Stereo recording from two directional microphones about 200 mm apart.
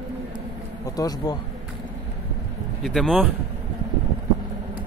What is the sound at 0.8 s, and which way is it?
Speech, 20° left (ahead or behind).